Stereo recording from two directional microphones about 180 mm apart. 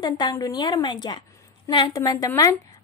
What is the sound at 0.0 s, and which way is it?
A woman's voice, 20° left (ahead or behind).